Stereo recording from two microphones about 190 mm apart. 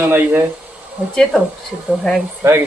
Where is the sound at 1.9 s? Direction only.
Centre (ahead or behind).